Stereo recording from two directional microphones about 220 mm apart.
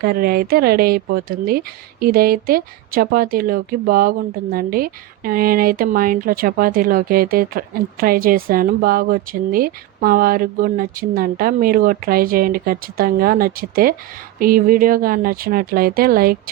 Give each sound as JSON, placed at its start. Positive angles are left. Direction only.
{"t": 0.0, "sound": "speech", "side_deg": -45}